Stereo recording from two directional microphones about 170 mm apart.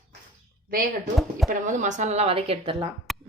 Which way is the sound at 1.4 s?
50° right (ahead or behind).